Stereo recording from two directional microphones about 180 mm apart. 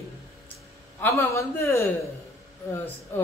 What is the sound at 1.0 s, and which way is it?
Speech, 15° left (ahead or behind).